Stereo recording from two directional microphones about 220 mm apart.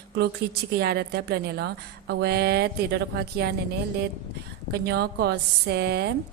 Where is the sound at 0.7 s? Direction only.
45° right (ahead or behind).